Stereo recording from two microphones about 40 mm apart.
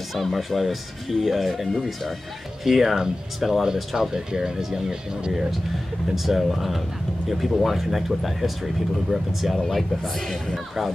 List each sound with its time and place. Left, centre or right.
0.1 s speech: centre
2.6 s speech: centre
6.1 s speech: centre